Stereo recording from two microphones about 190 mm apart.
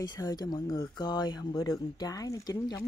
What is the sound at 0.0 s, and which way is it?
Speech, 20° left (ahead or behind).